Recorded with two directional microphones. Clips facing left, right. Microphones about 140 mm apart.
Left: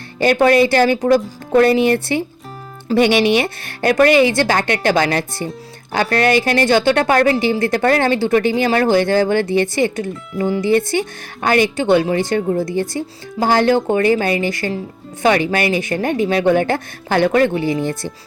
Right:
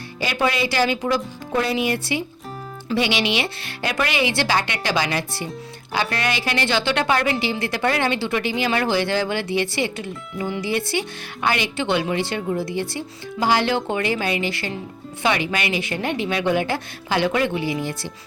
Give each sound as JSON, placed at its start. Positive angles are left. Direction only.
{"t": 0.2, "sound": "a woman's voice", "side_deg": 50}